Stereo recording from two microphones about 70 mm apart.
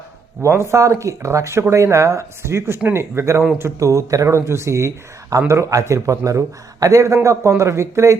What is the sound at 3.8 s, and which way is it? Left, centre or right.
A man's voice, right.